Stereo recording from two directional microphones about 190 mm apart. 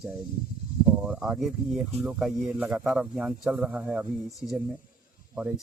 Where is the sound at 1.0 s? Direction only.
5° right (ahead or behind).